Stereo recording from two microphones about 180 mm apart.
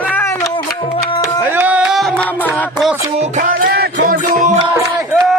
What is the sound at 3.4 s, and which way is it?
Music, 55° right (ahead or behind).